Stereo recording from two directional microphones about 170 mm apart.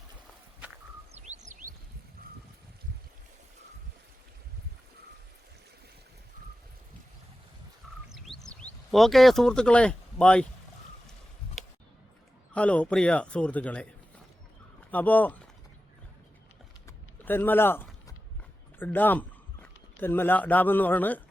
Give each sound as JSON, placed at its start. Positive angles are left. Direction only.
{"t": 1.1, "sound": "bird", "side_deg": -40}
{"t": 1.5, "sound": "a sound", "side_deg": -50}
{"t": 8.4, "sound": "speech", "side_deg": 0}
{"t": 12.5, "sound": "a man's voice", "side_deg": 10}
{"t": 14.8, "sound": "speech", "side_deg": 10}
{"t": 16.8, "sound": "a sound", "side_deg": 10}
{"t": 18.8, "sound": "a man's voice", "side_deg": 10}